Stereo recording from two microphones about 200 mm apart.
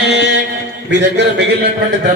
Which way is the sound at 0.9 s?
60° right (ahead or behind).